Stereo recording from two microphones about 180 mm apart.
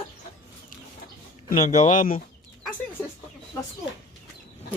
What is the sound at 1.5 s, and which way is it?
Speech, 45° left (ahead or behind).